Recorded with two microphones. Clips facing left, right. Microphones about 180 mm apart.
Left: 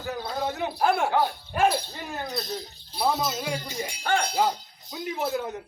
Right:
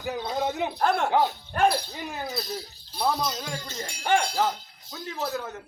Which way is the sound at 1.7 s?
5° right (ahead or behind).